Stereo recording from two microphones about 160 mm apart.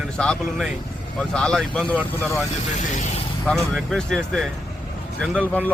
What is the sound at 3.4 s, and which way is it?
Speech, centre (ahead or behind).